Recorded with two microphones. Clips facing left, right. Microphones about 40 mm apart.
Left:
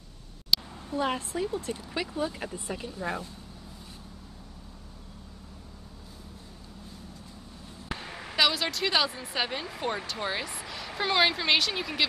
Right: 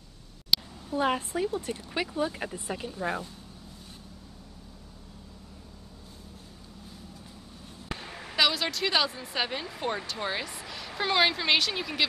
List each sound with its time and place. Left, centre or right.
0.9 s a woman's voice: centre
8.1 s a sound: centre
8.4 s a woman's voice: centre